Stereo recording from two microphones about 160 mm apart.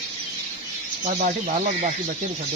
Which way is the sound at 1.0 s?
45° right (ahead or behind).